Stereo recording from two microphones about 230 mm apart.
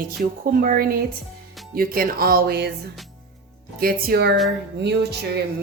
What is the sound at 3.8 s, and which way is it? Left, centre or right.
Speech, right.